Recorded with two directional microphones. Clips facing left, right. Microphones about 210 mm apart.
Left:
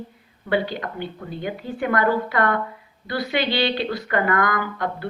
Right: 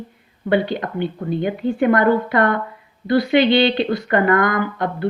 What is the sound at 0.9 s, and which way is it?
A woman's voice, 25° right (ahead or behind).